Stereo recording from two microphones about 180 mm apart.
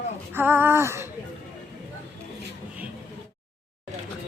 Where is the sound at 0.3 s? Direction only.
10° right (ahead or behind).